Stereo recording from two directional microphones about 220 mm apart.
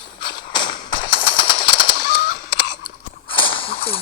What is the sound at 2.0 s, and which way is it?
Fowl, 35° left (ahead or behind).